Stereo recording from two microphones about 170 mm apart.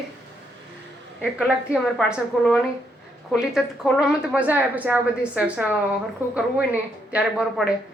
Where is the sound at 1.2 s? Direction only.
5° right (ahead or behind).